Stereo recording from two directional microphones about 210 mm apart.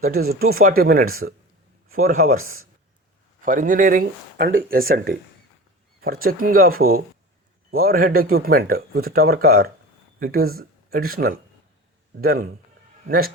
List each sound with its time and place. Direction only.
0.0 s speech: 45° right (ahead or behind)
0.3 s speech: 80° right
0.5 s speech: 45° right (ahead or behind)
2.3 s speech: 80° right
3.4 s speech: 40° right (ahead or behind)